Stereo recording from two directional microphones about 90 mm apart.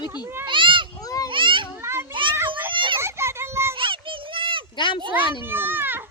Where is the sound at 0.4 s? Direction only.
65° right (ahead or behind).